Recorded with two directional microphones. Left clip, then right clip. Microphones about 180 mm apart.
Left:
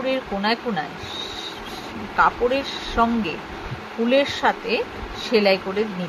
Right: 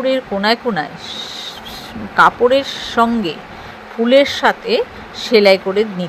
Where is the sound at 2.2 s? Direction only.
30° right (ahead or behind).